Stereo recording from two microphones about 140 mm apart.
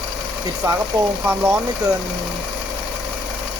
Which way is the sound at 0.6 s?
20° right (ahead or behind).